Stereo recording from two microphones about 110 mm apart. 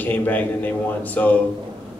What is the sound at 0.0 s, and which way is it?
Speech, 15° left (ahead or behind).